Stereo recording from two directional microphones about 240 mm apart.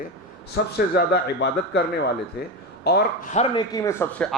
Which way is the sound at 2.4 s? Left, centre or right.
Left.